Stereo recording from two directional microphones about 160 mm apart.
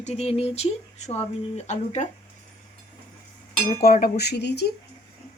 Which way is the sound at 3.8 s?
65° left (ahead or behind).